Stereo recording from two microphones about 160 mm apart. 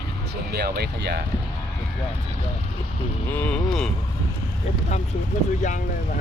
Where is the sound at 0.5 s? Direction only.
85° right.